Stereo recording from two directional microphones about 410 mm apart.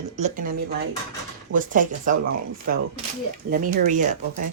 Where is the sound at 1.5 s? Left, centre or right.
Centre.